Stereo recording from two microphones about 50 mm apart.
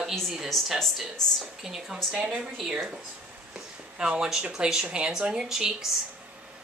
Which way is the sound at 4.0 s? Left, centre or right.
Centre.